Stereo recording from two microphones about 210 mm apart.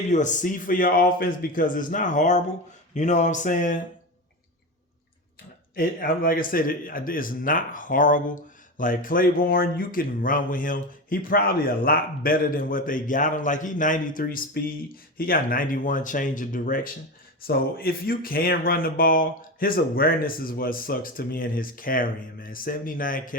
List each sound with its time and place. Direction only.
0.1 s speech: 35° left (ahead or behind)
5.7 s speech: 45° left (ahead or behind)